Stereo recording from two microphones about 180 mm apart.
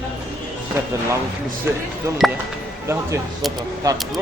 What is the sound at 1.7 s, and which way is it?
Speech, 15° right (ahead or behind).